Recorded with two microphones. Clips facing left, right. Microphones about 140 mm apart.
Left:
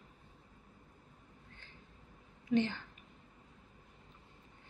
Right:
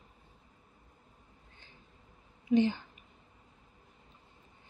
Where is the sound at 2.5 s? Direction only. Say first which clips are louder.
Right 5 dB; 15° right (ahead or behind).